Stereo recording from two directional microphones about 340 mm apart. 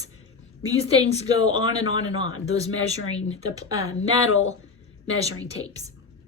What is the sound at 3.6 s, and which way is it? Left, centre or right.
Child singing, centre.